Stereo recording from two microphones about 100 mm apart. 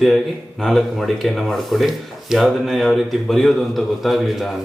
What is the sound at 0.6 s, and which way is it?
Speech, 5° left (ahead or behind).